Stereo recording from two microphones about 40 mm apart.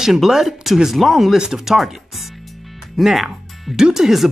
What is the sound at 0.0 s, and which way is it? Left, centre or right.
Speech, centre.